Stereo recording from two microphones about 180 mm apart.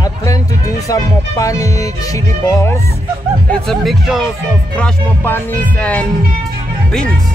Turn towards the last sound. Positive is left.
turn(degrees=10)  # may be behind; listen again after turning